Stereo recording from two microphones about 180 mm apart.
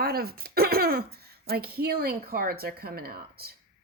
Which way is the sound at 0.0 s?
60° right (ahead or behind).